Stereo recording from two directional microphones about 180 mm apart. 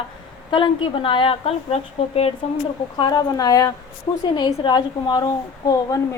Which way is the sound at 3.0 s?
20° left (ahead or behind).